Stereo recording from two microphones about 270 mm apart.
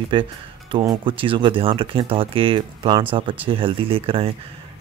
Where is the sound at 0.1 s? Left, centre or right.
Centre.